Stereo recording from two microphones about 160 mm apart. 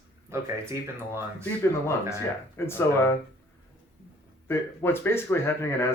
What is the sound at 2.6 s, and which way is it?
Speech, 15° left (ahead or behind).